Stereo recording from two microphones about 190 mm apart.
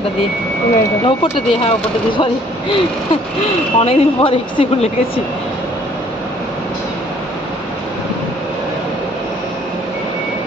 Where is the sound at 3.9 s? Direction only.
30° left (ahead or behind).